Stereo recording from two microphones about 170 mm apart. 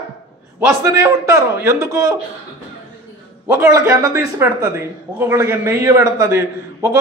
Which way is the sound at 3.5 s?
15° right (ahead or behind).